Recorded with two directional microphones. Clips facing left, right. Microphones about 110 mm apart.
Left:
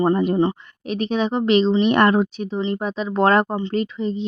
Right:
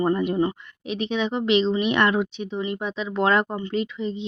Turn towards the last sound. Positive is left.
turn(degrees=40)  # may be behind; listen again after turning